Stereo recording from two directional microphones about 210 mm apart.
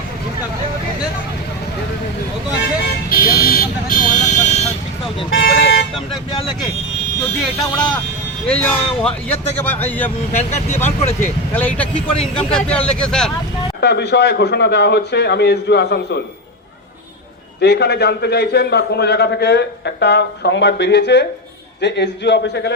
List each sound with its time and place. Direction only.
3.1 s vehicle: 45° left (ahead or behind)
5.5 s vehicle: 55° left (ahead or behind)
7.2 s speech: 20° left (ahead or behind)
8.4 s speech: 5° left (ahead or behind)
10.3 s speech: 35° left (ahead or behind)
11.5 s speech: 5° left (ahead or behind)
13.8 s a man's voice: 50° left (ahead or behind)
17.6 s a man's voice: 50° left (ahead or behind)